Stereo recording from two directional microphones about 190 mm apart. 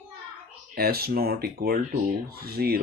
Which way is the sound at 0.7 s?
55° right (ahead or behind).